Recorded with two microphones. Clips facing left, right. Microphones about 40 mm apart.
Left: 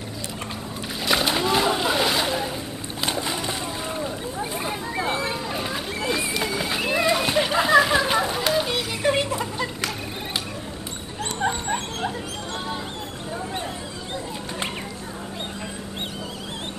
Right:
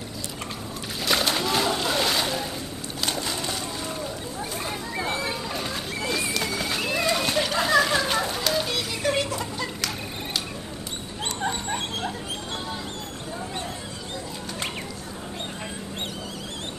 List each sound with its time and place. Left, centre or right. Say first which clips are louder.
1.0 s splash: left 2 dB; centre
3.0 s splash: left 2 dB; left
8.5 s music: left 3 dB; centre
11.4 s dog: left 4 dB; centre